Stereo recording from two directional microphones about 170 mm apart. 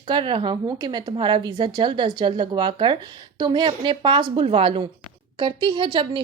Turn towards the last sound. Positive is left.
turn(degrees=-30)  # may be behind; listen again after turning